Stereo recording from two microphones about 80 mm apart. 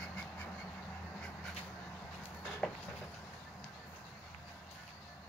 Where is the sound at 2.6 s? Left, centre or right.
Centre.